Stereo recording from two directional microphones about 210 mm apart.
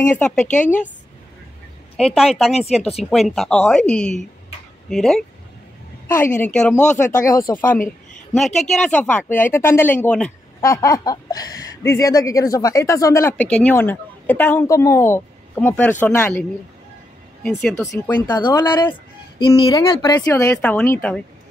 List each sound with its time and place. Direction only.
0.6 s speech: 10° left (ahead or behind)
2.0 s speech: centre (ahead or behind)
2.5 s speech: 30° left (ahead or behind)
3.1 s speech: centre (ahead or behind)
6.0 s a woman's voice: 10° left (ahead or behind)
8.4 s speech: centre (ahead or behind)
17.9 s speech: 15° left (ahead or behind)